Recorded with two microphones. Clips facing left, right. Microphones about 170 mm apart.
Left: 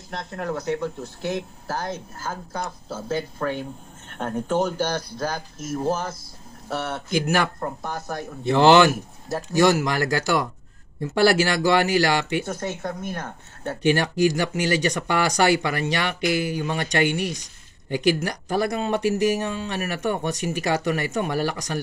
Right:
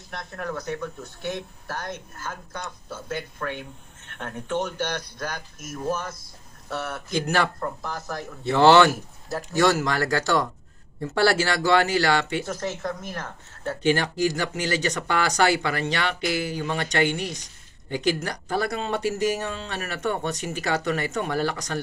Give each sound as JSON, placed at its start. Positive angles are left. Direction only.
{"t": 0.1, "sound": "speech", "side_deg": 20}
{"t": 7.2, "sound": "speech", "side_deg": 10}
{"t": 7.6, "sound": "speech", "side_deg": 30}
{"t": 8.5, "sound": "speech", "side_deg": 15}
{"t": 13.8, "sound": "speech", "side_deg": 15}